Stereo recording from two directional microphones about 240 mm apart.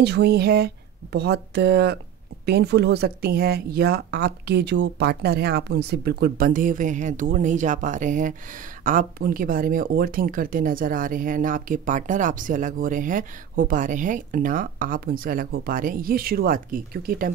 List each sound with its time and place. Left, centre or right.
0.0 s speech: right